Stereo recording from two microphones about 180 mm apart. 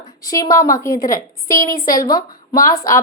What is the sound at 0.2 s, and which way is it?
A woman's voice, 20° left (ahead or behind).